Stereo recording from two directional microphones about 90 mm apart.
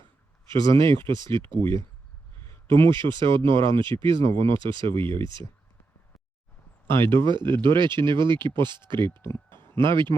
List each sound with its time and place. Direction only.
0.7 s speech: 65° right (ahead or behind)
2.6 s speech: 70° right (ahead or behind)
6.8 s speech: 30° left (ahead or behind)
7.3 s speech: 60° right (ahead or behind)